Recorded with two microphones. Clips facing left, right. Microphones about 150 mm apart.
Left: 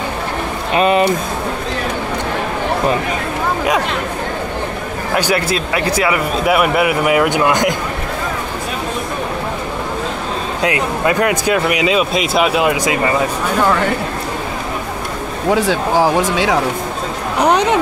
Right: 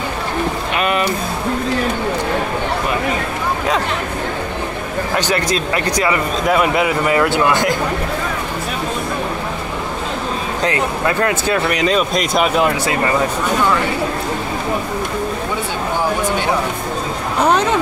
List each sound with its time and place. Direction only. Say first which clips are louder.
0.7 s speech: left 6 dB; 30° left (ahead or behind)
5.1 s speech: left 2 dB; 10° left (ahead or behind)
10.6 s speech: left 2 dB; 15° left (ahead or behind)
15.5 s speech: left 6 dB; 90° left
17.4 s speech: left 2 dB; 15° left (ahead or behind)